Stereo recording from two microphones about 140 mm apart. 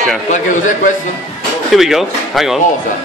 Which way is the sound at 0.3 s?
65° left (ahead or behind).